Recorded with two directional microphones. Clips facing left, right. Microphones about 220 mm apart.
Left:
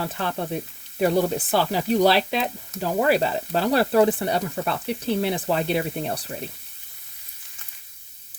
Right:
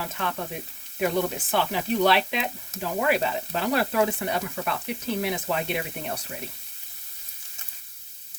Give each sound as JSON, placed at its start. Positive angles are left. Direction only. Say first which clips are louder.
{"t": 0.1, "sound": "sizzle", "louder": "left 4 dB", "side_deg": 35}